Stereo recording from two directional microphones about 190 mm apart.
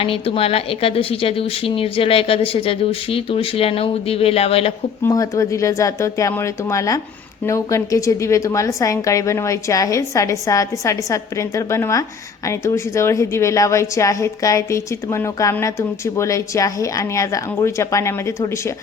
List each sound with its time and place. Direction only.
0.0 s a woman's voice: 30° left (ahead or behind)
5.0 s a woman's voice: 15° left (ahead or behind)